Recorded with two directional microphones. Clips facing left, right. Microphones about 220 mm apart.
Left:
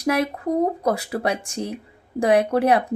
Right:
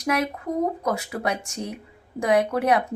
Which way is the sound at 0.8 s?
35° left (ahead or behind).